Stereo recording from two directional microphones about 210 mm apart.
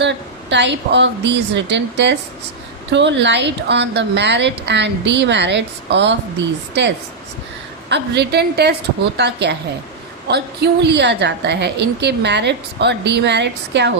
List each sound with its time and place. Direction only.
0.0 s a woman's voice: 55° right (ahead or behind)
7.9 s a woman's voice: 55° right (ahead or behind)